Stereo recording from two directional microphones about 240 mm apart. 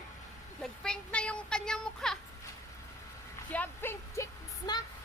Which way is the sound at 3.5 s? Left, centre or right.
Centre.